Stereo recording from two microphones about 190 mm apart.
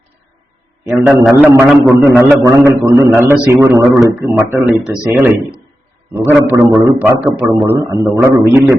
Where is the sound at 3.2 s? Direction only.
10° right (ahead or behind).